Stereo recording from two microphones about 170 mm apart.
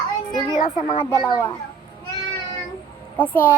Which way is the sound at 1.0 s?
25° left (ahead or behind).